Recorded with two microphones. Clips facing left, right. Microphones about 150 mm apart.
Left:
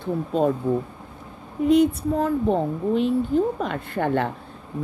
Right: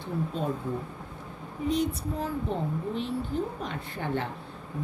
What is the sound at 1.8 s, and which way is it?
A woman's voice, 60° left (ahead or behind).